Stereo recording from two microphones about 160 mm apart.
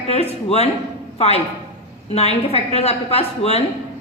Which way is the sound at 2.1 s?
40° left (ahead or behind).